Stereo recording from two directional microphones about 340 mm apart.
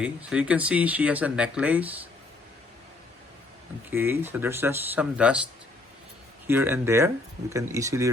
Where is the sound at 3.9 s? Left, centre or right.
Centre.